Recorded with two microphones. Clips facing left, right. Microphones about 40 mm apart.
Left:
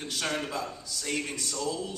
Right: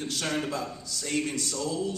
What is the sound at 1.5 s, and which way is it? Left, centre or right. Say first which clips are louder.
Speech: left 2 dB; left.